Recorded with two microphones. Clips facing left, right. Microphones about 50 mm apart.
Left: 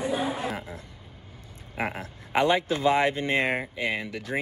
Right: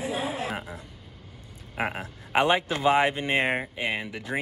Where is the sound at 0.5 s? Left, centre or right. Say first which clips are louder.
Right 1 dB; right.